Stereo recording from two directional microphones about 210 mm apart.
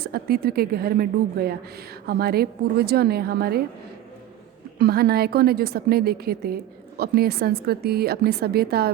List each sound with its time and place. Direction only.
0.0 s a woman's voice: 45° right (ahead or behind)
4.8 s a woman's voice: 45° right (ahead or behind)